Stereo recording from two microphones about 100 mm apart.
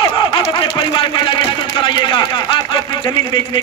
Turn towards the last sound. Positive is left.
turn(degrees=55)  # may be behind; listen again after turning